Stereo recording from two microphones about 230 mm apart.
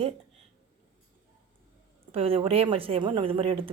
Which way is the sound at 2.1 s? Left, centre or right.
Right.